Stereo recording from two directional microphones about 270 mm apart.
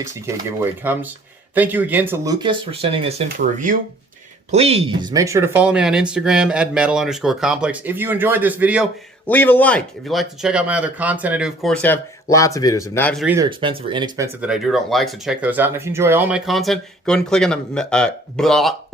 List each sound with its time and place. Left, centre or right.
0.8 s speech: centre
9.2 s speech: centre
13.2 s speech: centre
14.4 s speech: centre